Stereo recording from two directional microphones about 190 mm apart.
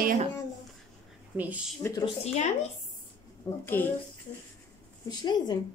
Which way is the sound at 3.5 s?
15° left (ahead or behind).